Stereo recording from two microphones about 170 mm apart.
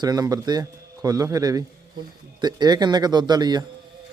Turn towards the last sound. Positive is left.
turn(degrees=-25)  # may be behind; listen again after turning